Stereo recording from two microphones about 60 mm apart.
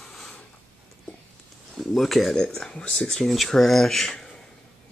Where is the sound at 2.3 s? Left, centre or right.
Centre.